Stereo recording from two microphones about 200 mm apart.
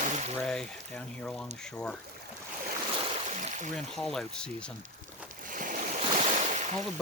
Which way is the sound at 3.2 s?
35° right (ahead or behind).